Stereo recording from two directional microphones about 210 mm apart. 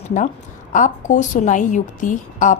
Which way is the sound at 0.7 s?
35° left (ahead or behind).